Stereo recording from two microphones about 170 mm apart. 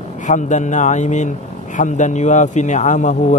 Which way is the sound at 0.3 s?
45° left (ahead or behind).